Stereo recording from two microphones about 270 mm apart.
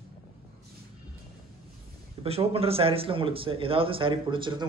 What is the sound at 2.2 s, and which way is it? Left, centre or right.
Speech, right.